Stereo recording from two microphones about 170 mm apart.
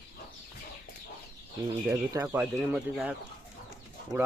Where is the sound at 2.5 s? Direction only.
5° right (ahead or behind).